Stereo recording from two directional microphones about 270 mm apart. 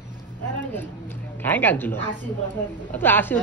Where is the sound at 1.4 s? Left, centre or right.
Centre.